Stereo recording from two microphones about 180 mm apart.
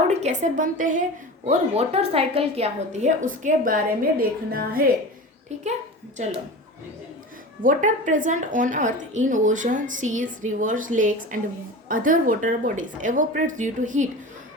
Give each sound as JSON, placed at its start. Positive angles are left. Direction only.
{"t": 0.1, "sound": "a woman's voice", "side_deg": -40}
{"t": 1.5, "sound": "a woman's voice", "side_deg": -35}
{"t": 6.2, "sound": "a woman's voice", "side_deg": -40}
{"t": 7.6, "sound": "a woman's voice", "side_deg": -45}